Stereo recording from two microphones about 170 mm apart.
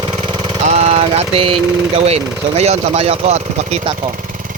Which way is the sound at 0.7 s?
40° right (ahead or behind).